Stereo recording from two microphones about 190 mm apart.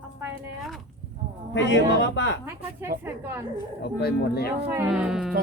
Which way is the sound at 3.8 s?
55° left (ahead or behind).